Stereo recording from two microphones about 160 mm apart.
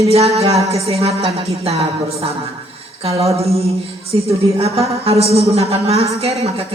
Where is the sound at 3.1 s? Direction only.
40° right (ahead or behind).